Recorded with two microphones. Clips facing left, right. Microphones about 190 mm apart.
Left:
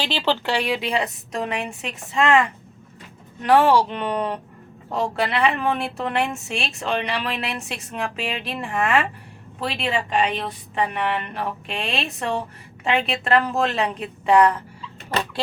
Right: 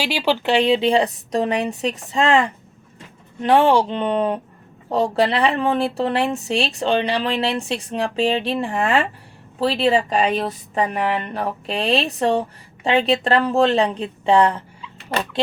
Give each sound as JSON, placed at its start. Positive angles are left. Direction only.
{"t": 0.0, "sound": "speech", "side_deg": -15}